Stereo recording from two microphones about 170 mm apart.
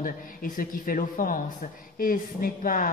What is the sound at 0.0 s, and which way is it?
A woman's voice, 55° left (ahead or behind).